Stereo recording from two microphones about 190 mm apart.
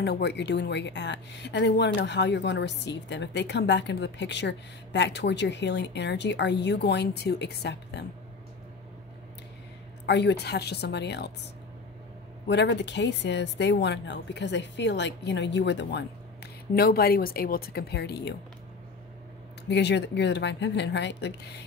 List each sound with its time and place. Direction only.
0.0 s speech: 60° left (ahead or behind)
10.0 s speech: 65° left (ahead or behind)
12.4 s a woman's voice: 65° left (ahead or behind)
16.7 s a woman's voice: 55° left (ahead or behind)
19.7 s speech: 65° left (ahead or behind)